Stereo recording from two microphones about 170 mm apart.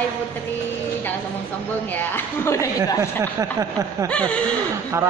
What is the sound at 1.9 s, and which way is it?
Speech, 15° left (ahead or behind).